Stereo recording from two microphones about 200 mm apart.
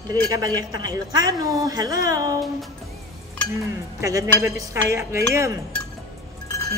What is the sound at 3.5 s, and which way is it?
Speech, 15° right (ahead or behind).